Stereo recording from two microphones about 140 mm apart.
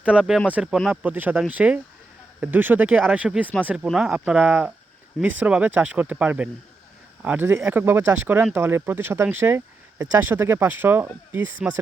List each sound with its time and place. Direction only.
0.0 s speech: 10° right (ahead or behind)